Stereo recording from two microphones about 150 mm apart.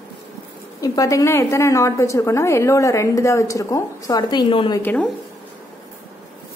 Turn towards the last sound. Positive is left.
turn(degrees=10)  # may be behind; listen again after turning